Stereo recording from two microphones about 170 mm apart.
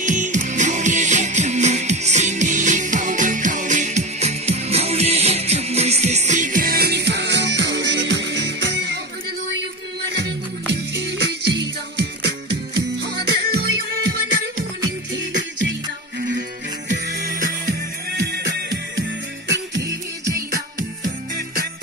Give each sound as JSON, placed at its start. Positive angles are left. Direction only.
{"t": 0.0, "sound": "music", "side_deg": -45}
{"t": 10.0, "sound": "music", "side_deg": -80}
{"t": 15.1, "sound": "music", "side_deg": -90}
{"t": 17.2, "sound": "music", "side_deg": -55}
{"t": 18.2, "sound": "music", "side_deg": -80}